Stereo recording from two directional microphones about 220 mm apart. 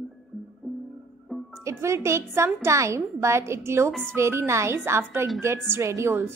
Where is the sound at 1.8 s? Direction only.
10° right (ahead or behind).